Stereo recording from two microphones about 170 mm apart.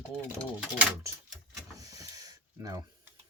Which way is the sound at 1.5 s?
20° right (ahead or behind).